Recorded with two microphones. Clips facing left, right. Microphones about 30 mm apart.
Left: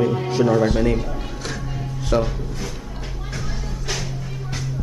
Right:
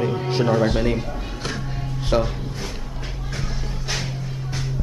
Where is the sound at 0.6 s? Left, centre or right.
Right.